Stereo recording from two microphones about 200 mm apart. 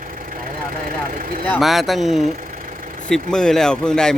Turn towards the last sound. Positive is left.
turn(degrees=5)  # may be behind; listen again after turning